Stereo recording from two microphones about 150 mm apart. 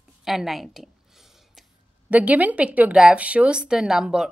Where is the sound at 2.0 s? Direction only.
10° right (ahead or behind).